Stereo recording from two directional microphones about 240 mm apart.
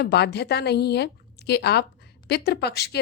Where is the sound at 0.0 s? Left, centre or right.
Left.